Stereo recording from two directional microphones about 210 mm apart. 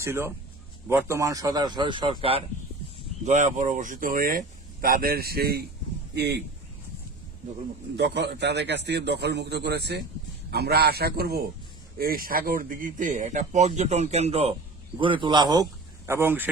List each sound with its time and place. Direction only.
0.0 s a man's voice: 10° right (ahead or behind)
3.2 s speech: 35° right (ahead or behind); by 6.4 s 50° right (ahead or behind)
7.9 s a man's voice: 55° right (ahead or behind); by 16.5 s 10° right (ahead or behind)